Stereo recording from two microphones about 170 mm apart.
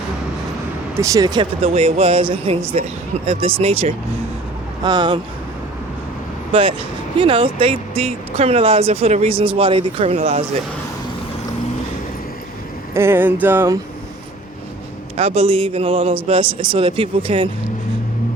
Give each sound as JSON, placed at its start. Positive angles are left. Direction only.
{"t": 0.9, "sound": "speech", "side_deg": -20}
{"t": 4.8, "sound": "speech", "side_deg": -25}
{"t": 6.5, "sound": "speech", "side_deg": -35}
{"t": 12.9, "sound": "speech", "side_deg": -15}
{"t": 15.1, "sound": "speech", "side_deg": -35}